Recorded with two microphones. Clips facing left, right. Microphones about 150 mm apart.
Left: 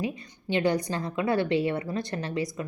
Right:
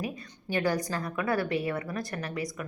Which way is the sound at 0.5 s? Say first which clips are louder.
Left 3 dB; 20° left (ahead or behind).